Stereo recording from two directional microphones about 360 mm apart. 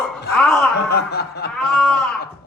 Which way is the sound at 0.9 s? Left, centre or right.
Left.